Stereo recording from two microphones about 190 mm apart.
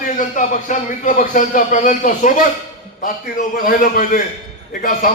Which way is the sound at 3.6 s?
45° left (ahead or behind).